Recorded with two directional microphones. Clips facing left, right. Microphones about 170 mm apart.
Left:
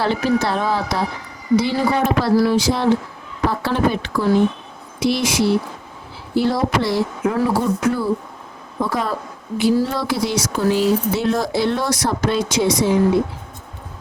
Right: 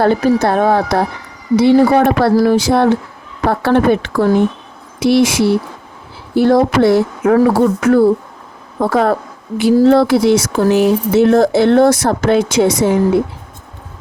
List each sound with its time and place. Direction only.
0.0 s speech: 50° right (ahead or behind)